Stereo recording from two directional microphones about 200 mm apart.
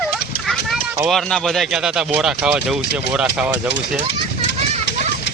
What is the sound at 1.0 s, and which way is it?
Speech, centre (ahead or behind).